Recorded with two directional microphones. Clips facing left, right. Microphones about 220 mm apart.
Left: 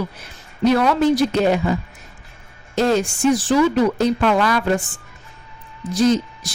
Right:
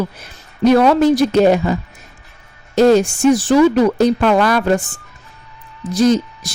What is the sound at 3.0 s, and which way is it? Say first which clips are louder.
A woman's voice: right 4 dB; 45° right (ahead or behind).